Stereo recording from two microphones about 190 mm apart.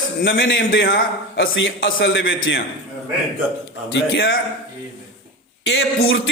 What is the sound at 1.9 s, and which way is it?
Speech, 60° left (ahead or behind).